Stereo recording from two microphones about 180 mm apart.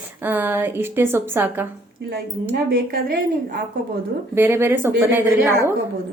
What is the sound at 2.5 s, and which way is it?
A woman's voice, 55° right (ahead or behind).